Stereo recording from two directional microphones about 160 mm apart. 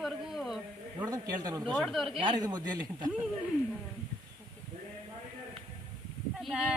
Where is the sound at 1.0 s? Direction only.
20° right (ahead or behind).